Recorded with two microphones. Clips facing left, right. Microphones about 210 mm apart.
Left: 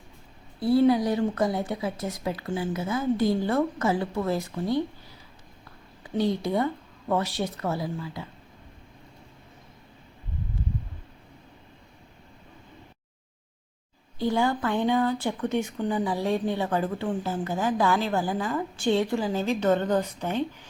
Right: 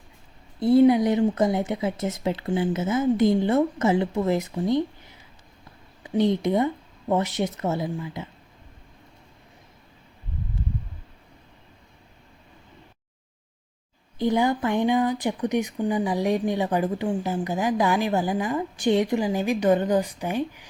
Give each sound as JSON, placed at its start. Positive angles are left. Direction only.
{"t": 0.6, "sound": "a woman's voice", "side_deg": -20}
{"t": 14.2, "sound": "speech", "side_deg": -20}